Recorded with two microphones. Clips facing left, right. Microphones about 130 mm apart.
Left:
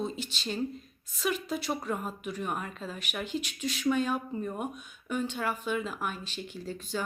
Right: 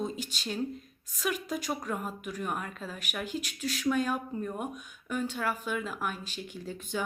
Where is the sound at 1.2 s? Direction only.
5° right (ahead or behind).